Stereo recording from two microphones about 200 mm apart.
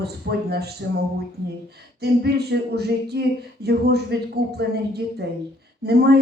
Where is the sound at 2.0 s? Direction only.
55° right (ahead or behind).